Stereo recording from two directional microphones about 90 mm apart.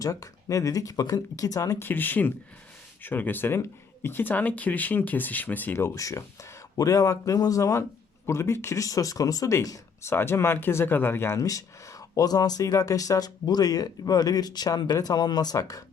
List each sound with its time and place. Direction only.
0.0 s speech: 35° left (ahead or behind)
1.8 s speech: 20° left (ahead or behind)
11.3 s speech: 40° left (ahead or behind)